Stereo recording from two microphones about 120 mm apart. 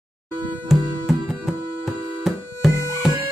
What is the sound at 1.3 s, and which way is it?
Music, 5° right (ahead or behind).